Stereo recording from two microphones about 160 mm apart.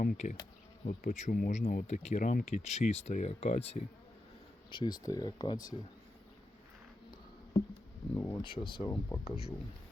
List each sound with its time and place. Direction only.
0.2 s speech: 45° left (ahead or behind)
4.7 s speech: 30° left (ahead or behind)
7.1 s a sound: 30° left (ahead or behind)
8.1 s speech: 15° left (ahead or behind)
8.4 s speech: 30° left (ahead or behind)
9.2 s speech: 40° left (ahead or behind)